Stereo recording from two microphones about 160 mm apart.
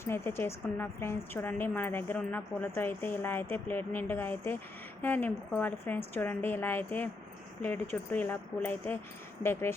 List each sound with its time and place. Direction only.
0.0 s speech: 15° left (ahead or behind)
8.1 s speech: 10° left (ahead or behind)